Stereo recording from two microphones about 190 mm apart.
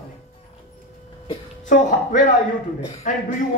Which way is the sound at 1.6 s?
40° left (ahead or behind).